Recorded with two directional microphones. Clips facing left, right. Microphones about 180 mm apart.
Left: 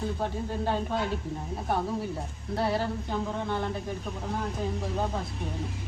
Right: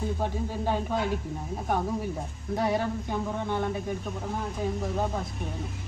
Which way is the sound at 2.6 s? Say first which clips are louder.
Right 1 dB; 15° right (ahead or behind).